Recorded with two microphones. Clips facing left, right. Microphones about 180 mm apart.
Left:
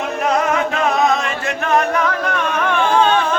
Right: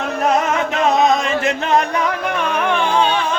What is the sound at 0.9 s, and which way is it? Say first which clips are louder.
Music: right 4 dB; 20° right (ahead or behind).